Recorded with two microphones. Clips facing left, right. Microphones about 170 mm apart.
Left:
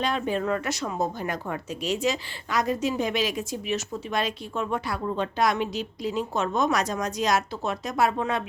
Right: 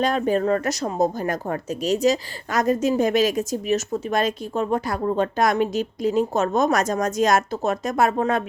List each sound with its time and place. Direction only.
0.0 s speech: 45° right (ahead or behind)